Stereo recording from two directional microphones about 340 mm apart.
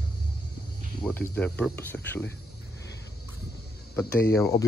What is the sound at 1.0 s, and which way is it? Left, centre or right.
Speech, centre.